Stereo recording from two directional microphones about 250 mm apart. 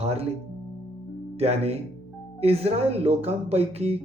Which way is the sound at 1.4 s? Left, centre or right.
Right.